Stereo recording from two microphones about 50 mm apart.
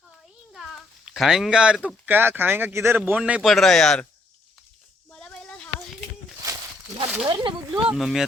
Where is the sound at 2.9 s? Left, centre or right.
Right.